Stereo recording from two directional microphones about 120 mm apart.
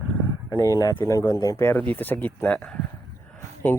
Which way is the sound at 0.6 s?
30° left (ahead or behind).